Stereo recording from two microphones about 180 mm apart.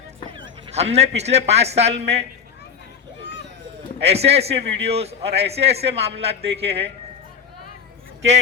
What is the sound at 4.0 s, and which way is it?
Speech, 35° right (ahead or behind).